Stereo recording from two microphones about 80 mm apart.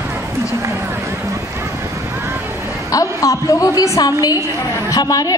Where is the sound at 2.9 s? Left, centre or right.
Left.